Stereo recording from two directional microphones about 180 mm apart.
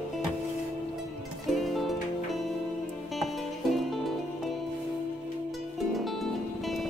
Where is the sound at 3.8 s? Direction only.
Centre (ahead or behind).